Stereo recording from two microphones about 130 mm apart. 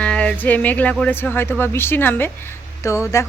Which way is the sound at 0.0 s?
10° left (ahead or behind).